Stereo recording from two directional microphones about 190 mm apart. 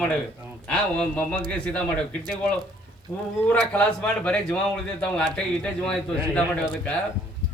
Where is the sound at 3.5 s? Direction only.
10° left (ahead or behind).